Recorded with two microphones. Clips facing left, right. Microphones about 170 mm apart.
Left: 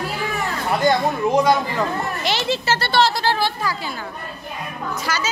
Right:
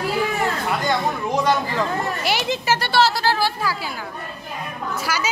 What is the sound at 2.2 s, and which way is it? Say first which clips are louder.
Speech: left 1 dB; 15° right (ahead or behind).